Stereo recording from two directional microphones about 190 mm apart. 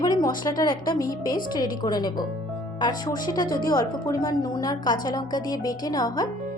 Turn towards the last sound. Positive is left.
turn(degrees=20)  # may be behind; listen again after turning